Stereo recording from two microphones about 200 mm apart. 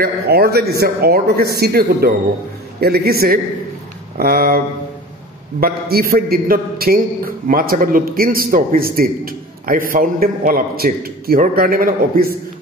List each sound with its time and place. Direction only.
0.0 s a man's voice: 50° right (ahead or behind)
5.6 s a man's voice: 50° right (ahead or behind)